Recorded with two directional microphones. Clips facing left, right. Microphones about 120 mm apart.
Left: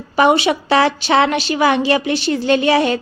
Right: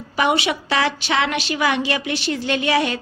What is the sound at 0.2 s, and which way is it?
A woman's voice, 35° left (ahead or behind).